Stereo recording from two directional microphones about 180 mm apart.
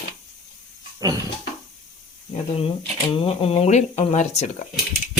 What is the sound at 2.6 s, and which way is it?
Speech, 30° left (ahead or behind).